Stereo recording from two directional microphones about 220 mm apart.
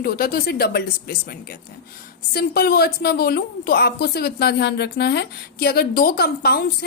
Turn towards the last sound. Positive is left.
turn(degrees=45)  # may be behind; listen again after turning